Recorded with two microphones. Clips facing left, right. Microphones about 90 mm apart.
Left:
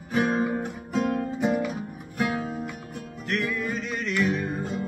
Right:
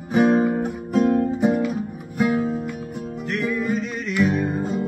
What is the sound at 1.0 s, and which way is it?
Music, 5° right (ahead or behind).